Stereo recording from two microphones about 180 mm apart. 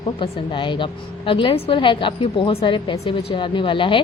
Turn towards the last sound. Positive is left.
turn(degrees=25)  # may be behind; listen again after turning